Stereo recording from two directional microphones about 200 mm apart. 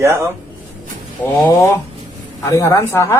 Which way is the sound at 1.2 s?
10° left (ahead or behind).